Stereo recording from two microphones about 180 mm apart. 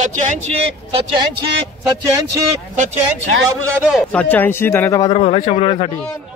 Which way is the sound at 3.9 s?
5° left (ahead or behind).